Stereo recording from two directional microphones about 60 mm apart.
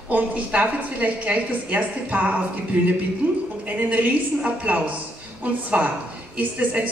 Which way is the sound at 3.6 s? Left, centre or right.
Right.